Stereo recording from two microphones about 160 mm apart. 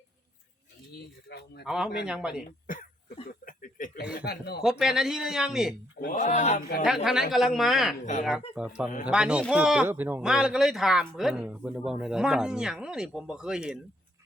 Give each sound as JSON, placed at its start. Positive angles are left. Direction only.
{"t": 1.3, "sound": "speech", "side_deg": 90}
{"t": 1.6, "sound": "speech", "side_deg": -5}
{"t": 2.7, "sound": "cough", "side_deg": 60}
{"t": 3.2, "sound": "speech", "side_deg": 55}
{"t": 4.2, "sound": "speech", "side_deg": 90}
{"t": 4.6, "sound": "speech", "side_deg": -5}
{"t": 6.1, "sound": "a man's voice", "side_deg": 50}
{"t": 6.8, "sound": "speech", "side_deg": -5}